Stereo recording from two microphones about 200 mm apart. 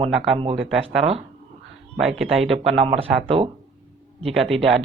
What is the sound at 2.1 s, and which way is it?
Speech, centre (ahead or behind).